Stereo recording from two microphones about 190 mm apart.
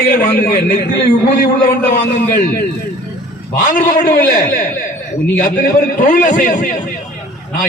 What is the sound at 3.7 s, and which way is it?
Speech, 45° left (ahead or behind).